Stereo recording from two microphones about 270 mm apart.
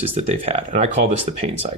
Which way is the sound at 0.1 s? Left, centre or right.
Right.